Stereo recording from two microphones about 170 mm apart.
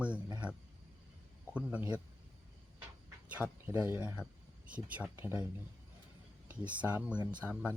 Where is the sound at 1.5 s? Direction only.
5° right (ahead or behind).